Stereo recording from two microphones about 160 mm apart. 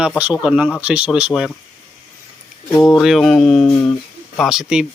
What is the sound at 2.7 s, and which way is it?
Speech, 20° left (ahead or behind).